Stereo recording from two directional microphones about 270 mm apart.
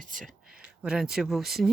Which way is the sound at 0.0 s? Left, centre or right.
Right.